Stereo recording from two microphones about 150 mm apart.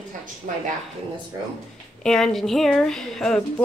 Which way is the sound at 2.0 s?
5° left (ahead or behind).